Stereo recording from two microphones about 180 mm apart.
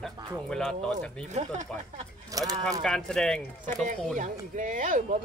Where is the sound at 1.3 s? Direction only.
40° right (ahead or behind).